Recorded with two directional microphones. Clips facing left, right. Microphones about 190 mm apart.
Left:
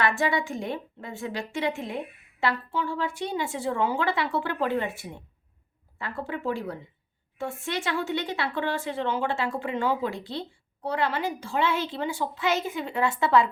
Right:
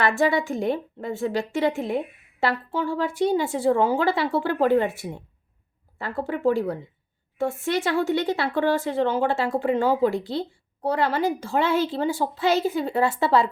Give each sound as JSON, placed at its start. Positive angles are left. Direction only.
{"t": 0.0, "sound": "a woman's voice", "side_deg": -35}
{"t": 6.0, "sound": "a woman's voice", "side_deg": -40}